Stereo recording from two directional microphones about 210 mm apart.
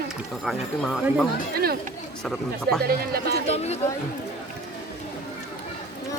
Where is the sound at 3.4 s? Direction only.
30° left (ahead or behind).